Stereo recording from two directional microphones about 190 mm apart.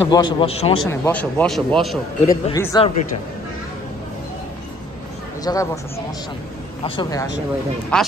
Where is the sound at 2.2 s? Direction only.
15° left (ahead or behind).